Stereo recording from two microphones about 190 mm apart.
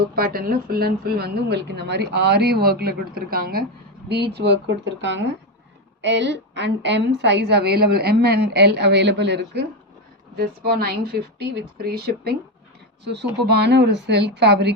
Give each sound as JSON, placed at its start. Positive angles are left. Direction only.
{"t": 0.2, "sound": "a woman's voice", "side_deg": -50}
{"t": 4.4, "sound": "a woman's voice", "side_deg": -60}
{"t": 13.5, "sound": "a woman's voice", "side_deg": -60}